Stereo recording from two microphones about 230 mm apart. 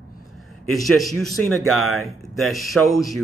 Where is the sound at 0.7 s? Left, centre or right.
Centre.